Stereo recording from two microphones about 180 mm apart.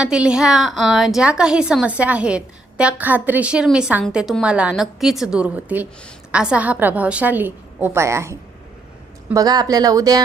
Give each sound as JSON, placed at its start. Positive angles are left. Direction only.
{"t": 0.0, "sound": "a woman's voice", "side_deg": -5}